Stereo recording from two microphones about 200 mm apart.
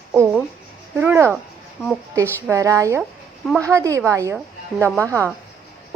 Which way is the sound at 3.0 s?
Centre (ahead or behind).